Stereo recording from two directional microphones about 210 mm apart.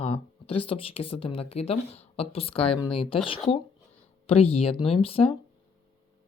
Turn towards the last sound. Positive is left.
turn(degrees=25)  # may be behind; listen again after turning